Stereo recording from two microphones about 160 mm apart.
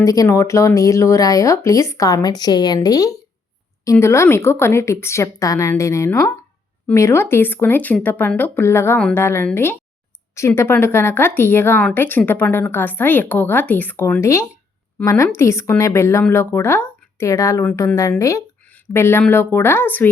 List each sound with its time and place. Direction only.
0.0 s speech: 20° left (ahead or behind)